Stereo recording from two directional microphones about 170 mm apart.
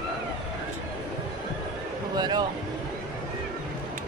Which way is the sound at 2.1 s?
25° right (ahead or behind).